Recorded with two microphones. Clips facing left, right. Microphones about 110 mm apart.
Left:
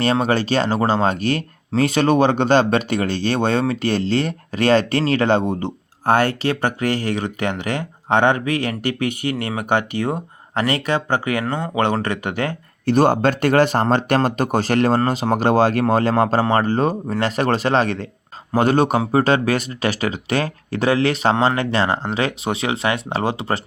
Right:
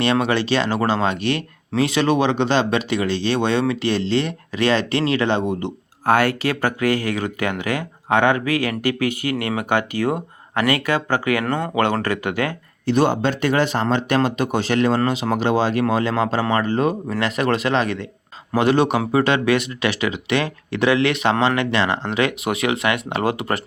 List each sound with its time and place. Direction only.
0.0 s speech: 40° left (ahead or behind)
5.5 s speech: 30° left (ahead or behind)
12.8 s speech: 45° left (ahead or behind); by 23.6 s 30° left (ahead or behind)